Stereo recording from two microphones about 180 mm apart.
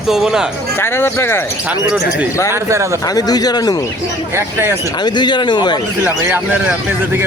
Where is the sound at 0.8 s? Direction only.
15° left (ahead or behind).